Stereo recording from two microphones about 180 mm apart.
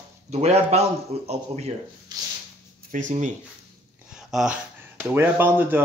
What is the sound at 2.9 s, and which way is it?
Speech, 40° right (ahead or behind).